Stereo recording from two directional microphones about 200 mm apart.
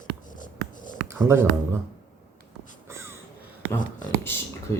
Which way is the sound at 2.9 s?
15° right (ahead or behind).